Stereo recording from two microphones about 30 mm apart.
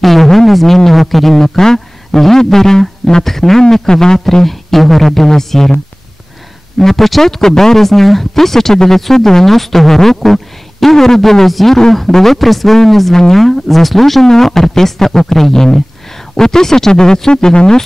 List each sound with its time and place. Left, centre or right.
0.0 s a sound: centre
0.5 s speech: centre
4.5 s speech: centre
6.8 s speech: centre